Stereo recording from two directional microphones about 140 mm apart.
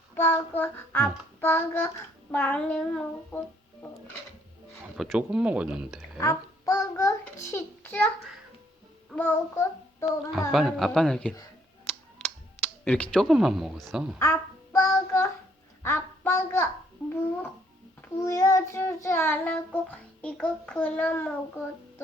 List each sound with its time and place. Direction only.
0.1 s child singing: 15° left (ahead or behind)
4.9 s speech: 5° right (ahead or behind)
6.1 s child singing: 25° left (ahead or behind)
7.5 s a child's voice: 15° left (ahead or behind)
9.1 s child singing: 20° left (ahead or behind)
10.5 s speech: centre (ahead or behind)
12.8 s speech: 5° left (ahead or behind)
14.2 s child singing: 20° left (ahead or behind)
15.8 s a woman's voice: 15° left (ahead or behind)
18.2 s child singing: 20° left (ahead or behind)